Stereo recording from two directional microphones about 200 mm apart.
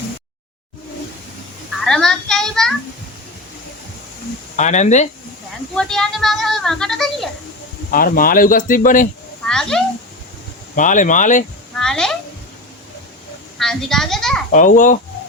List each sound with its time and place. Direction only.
1.8 s child singing: centre (ahead or behind)
4.5 s speech: 35° left (ahead or behind)
5.7 s speech: centre (ahead or behind)
7.9 s speech: 45° left (ahead or behind)
9.5 s a child's voice: 5° left (ahead or behind)
10.8 s speech: 40° left (ahead or behind)
11.8 s a sound: 5° left (ahead or behind)
13.6 s speech: centre (ahead or behind)
14.5 s speech: 40° left (ahead or behind)